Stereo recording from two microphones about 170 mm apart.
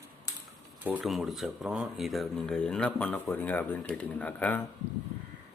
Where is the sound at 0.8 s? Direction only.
5° right (ahead or behind).